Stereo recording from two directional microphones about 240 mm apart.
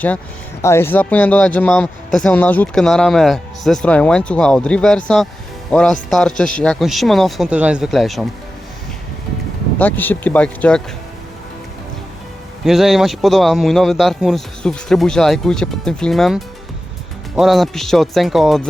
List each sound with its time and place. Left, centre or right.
0.6 s speech: centre
9.7 s speech: centre
12.6 s speech: centre